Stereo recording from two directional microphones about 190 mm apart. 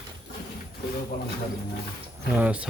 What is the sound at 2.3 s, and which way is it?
Speech, 5° right (ahead or behind).